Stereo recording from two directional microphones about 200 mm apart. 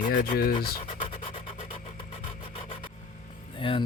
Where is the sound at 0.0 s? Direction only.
45° left (ahead or behind).